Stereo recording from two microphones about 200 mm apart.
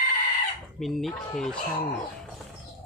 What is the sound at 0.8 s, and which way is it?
Speech, centre (ahead or behind).